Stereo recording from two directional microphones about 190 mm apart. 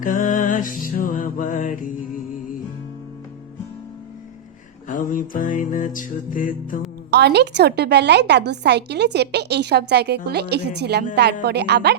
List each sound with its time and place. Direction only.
0.0 s music: 45° left (ahead or behind)
4.9 s music: 45° left (ahead or behind)
7.1 s a woman's voice: 60° right (ahead or behind)